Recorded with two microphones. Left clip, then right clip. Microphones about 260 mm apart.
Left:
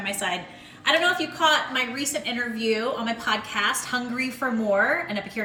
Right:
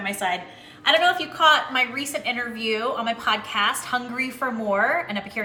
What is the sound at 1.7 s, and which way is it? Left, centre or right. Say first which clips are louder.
A woman's voice: right 3 dB; centre.